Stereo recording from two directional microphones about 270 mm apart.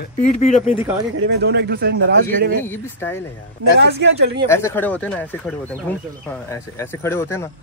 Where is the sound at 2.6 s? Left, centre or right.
Centre.